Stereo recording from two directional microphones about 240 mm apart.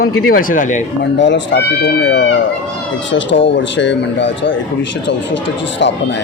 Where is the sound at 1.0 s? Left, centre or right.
Left.